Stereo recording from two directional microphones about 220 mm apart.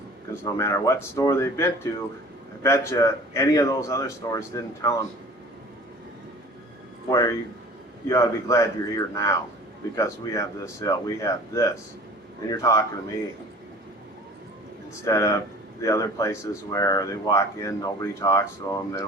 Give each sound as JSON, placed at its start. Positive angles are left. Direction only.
{"t": 0.4, "sound": "speech", "side_deg": 15}
{"t": 7.1, "sound": "speech", "side_deg": 15}
{"t": 15.0, "sound": "speech", "side_deg": 15}